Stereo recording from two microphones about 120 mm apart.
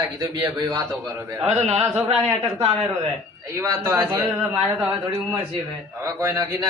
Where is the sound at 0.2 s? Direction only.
35° right (ahead or behind).